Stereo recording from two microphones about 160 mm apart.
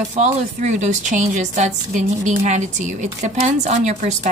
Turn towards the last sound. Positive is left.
turn(degrees=-45)  # may be behind; listen again after turning